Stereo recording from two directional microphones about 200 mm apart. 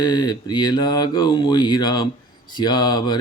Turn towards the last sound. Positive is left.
turn(degrees=20)  # may be behind; listen again after turning